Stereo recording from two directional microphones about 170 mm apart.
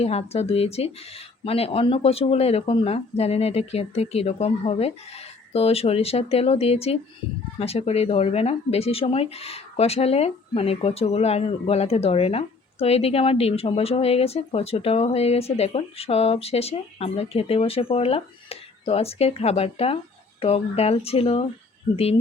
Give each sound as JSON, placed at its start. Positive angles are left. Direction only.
{"t": 0.0, "sound": "speech", "side_deg": 35}